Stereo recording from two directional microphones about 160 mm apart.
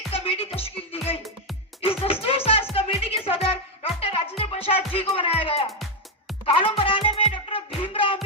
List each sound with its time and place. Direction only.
0.1 s music: 35° left (ahead or behind)